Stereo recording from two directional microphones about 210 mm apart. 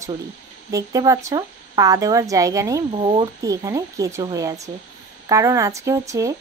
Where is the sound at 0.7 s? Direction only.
15° right (ahead or behind).